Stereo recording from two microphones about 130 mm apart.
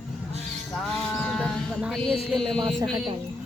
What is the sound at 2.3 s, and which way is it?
Speech, 5° left (ahead or behind).